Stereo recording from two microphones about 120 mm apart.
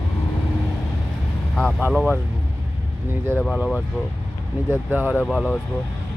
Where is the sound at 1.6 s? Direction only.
5° left (ahead or behind).